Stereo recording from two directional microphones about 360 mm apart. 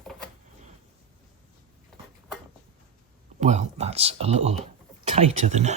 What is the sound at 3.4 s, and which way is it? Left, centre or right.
Speech, centre.